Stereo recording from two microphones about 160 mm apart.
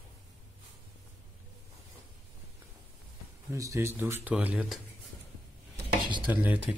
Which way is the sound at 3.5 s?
20° right (ahead or behind).